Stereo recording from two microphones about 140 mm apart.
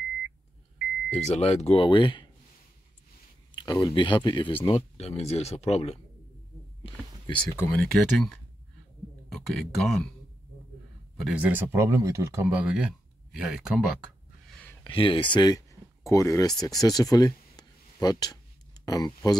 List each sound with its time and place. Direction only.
1.1 s speech: 50° left (ahead or behind); by 2.2 s 35° left (ahead or behind)
3.5 s speech: 30° left (ahead or behind)
4.6 s speech: 45° left (ahead or behind)
6.8 s a sound: 40° left (ahead or behind)
7.7 s speech: 5° left (ahead or behind)
9.5 s speech: centre (ahead or behind)
11.1 s speech: centre (ahead or behind)
11.4 s speech: 15° right (ahead or behind)
14.8 s speech: 40° left (ahead or behind)